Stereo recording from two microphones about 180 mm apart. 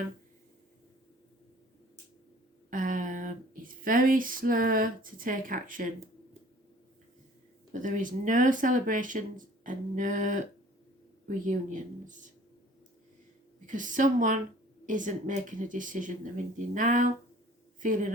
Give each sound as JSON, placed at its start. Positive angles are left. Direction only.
{"t": 2.6, "sound": "a sound", "side_deg": -50}
{"t": 7.7, "sound": "speech", "side_deg": -45}
{"t": 13.7, "sound": "speech", "side_deg": -45}